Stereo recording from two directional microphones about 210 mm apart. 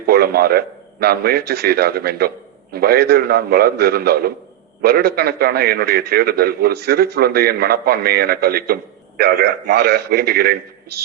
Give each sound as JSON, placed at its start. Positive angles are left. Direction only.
{"t": 0.0, "sound": "a man's voice", "side_deg": -45}